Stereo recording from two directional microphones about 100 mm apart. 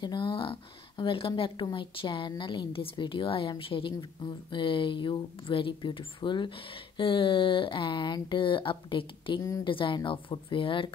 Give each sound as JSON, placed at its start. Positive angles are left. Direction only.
{"t": 0.0, "sound": "speech", "side_deg": 55}